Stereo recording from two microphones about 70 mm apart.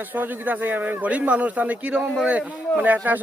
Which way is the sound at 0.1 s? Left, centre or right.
Right.